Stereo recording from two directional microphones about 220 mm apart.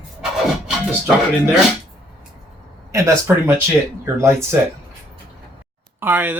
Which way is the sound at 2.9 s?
15° right (ahead or behind).